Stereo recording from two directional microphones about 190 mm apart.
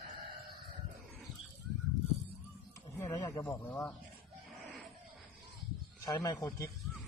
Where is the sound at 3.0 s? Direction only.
15° left (ahead or behind).